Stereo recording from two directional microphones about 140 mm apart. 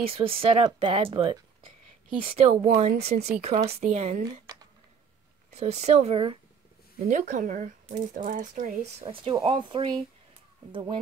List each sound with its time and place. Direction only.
0.0 s speech: 45° right (ahead or behind)
5.5 s speech: 50° right (ahead or behind)
7.1 s speech: 65° right (ahead or behind)
9.1 s speech: 40° right (ahead or behind)